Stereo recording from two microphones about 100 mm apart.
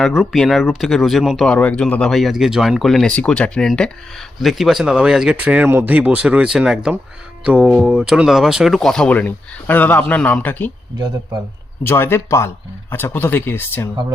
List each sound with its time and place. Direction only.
0.0 s speech: 5° left (ahead or behind)
1.5 s speech: 10° left (ahead or behind)
4.4 s speech: centre (ahead or behind); by 10.7 s 15° left (ahead or behind)
11.8 s speech: 25° left (ahead or behind)